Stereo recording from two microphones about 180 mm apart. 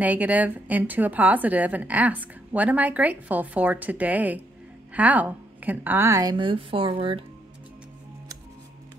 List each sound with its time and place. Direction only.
0.0 s a woman's voice: 10° right (ahead or behind); by 7.2 s 30° right (ahead or behind)